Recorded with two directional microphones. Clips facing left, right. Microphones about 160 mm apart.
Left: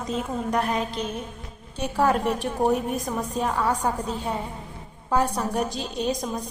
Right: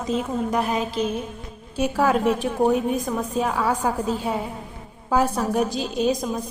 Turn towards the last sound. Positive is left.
turn(degrees=-5)  # may be behind; listen again after turning